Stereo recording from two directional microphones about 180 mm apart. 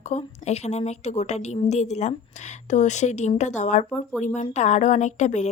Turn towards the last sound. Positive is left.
turn(degrees=40)  # may be behind; listen again after turning